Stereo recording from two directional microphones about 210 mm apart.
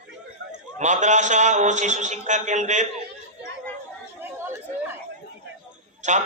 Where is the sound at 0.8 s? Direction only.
35° right (ahead or behind).